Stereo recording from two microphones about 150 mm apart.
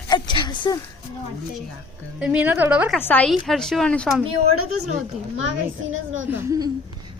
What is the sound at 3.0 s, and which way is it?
Speech, 10° left (ahead or behind).